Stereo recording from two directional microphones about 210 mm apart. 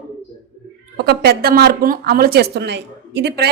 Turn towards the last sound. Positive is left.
turn(degrees=-50)  # may be behind; listen again after turning